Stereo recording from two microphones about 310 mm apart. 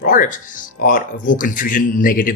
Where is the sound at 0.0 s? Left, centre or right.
Left.